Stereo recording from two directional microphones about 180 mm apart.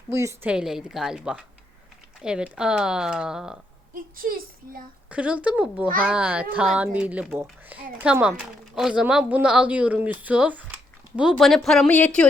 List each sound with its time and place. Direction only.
0.1 s speech: 15° right (ahead or behind)
0.5 s speech: 5° right (ahead or behind)
3.9 s speech: 50° right (ahead or behind)
5.1 s speech: 5° right (ahead or behind)